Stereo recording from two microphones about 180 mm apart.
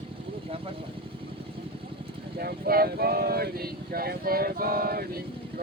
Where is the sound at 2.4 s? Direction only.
60° right (ahead or behind).